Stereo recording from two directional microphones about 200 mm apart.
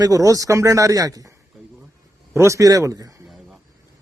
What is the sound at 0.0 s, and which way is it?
Speech, 15° right (ahead or behind).